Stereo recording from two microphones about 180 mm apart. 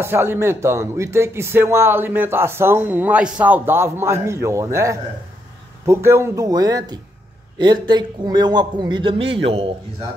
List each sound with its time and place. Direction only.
0.0 s a man's voice: 10° right (ahead or behind); by 9.7 s 30° right (ahead or behind)